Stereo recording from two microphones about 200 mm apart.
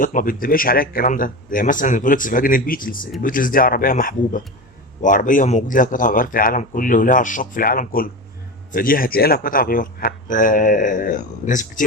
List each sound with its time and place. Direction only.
0.0 s speech: 45° left (ahead or behind)